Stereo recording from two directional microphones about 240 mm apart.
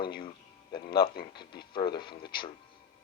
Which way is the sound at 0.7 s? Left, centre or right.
Left.